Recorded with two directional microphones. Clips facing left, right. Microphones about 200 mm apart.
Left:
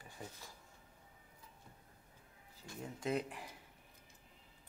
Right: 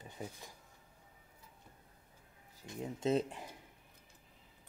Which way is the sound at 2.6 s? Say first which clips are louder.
Right 6 dB; 20° right (ahead or behind).